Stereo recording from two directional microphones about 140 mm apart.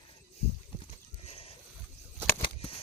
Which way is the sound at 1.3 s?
45° left (ahead or behind).